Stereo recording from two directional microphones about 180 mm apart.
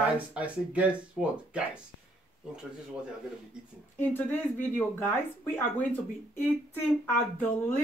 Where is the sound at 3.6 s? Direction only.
5° right (ahead or behind).